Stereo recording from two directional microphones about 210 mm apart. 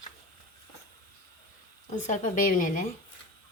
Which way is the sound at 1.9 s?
35° left (ahead or behind).